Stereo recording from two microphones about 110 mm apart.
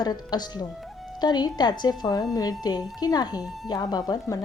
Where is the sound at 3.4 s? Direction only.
Centre (ahead or behind).